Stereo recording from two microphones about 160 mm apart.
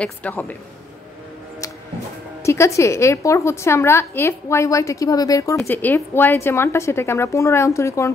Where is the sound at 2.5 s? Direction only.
20° left (ahead or behind).